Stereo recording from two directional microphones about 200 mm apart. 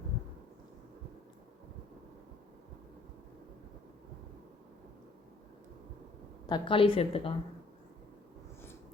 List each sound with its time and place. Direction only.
6.5 s a woman's voice: 25° left (ahead or behind)